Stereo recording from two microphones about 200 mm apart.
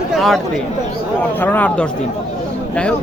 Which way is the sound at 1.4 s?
10° left (ahead or behind).